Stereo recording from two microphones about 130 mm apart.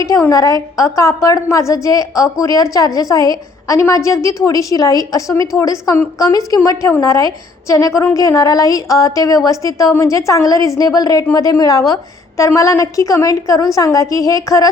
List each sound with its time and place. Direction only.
0.0 s a woman's voice: 25° left (ahead or behind)